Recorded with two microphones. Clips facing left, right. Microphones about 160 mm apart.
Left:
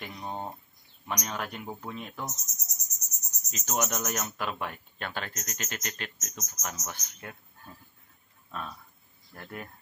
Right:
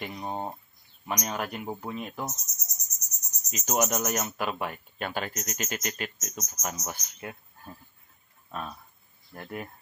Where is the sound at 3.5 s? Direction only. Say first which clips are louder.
Right 4 dB; 10° right (ahead or behind).